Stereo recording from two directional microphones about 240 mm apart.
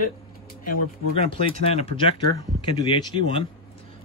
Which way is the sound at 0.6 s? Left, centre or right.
Left.